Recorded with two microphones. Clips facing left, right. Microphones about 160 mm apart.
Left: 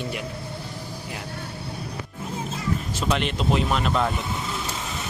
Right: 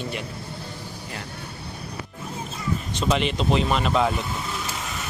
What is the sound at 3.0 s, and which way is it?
Speech, centre (ahead or behind).